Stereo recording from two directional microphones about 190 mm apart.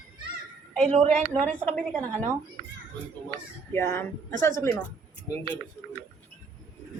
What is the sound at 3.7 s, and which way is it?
Speech, 15° left (ahead or behind).